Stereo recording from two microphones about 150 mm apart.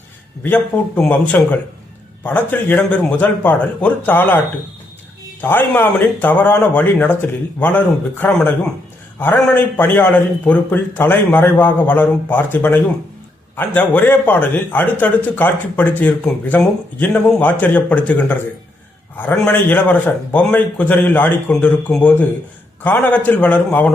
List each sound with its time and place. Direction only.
0.4 s speech: 10° left (ahead or behind)
2.2 s speech: 10° left (ahead or behind)
5.4 s speech: 15° left (ahead or behind)